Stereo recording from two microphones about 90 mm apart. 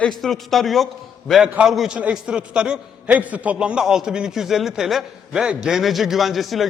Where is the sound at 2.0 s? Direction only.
15° right (ahead or behind).